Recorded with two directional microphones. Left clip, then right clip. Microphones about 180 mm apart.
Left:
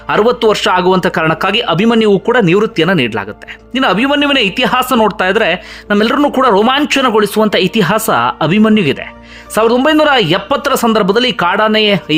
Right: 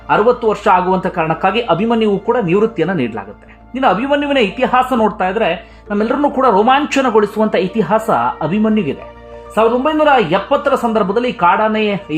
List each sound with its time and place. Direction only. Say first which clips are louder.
0.1 s speech: left 2 dB; 25° left (ahead or behind)
3.8 s speech: left 2 dB; 25° left (ahead or behind)